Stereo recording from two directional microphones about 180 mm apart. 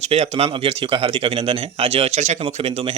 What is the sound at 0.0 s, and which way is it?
Speech, 35° right (ahead or behind).